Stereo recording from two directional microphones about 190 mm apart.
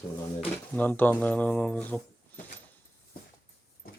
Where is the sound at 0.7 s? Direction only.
10° left (ahead or behind).